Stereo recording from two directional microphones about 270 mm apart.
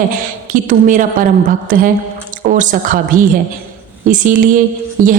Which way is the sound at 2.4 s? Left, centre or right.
Right.